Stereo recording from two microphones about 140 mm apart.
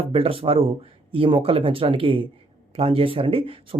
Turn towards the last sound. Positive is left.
turn(degrees=-40)  # may be behind; listen again after turning